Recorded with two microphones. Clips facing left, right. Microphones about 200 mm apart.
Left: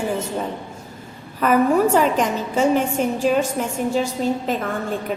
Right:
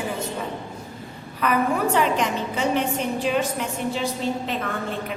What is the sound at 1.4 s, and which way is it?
A woman's voice, 45° left (ahead or behind).